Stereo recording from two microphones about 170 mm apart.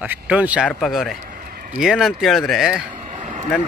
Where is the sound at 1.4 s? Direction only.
55° right (ahead or behind).